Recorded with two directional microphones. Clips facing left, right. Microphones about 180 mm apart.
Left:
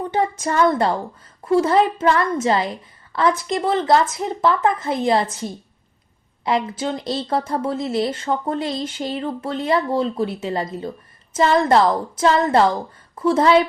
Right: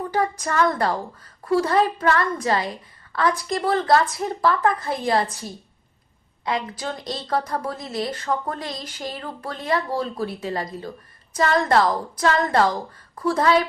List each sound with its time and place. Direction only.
0.1 s a woman's voice: 25° left (ahead or behind)